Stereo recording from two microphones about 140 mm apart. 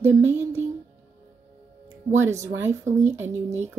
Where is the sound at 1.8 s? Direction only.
20° right (ahead or behind).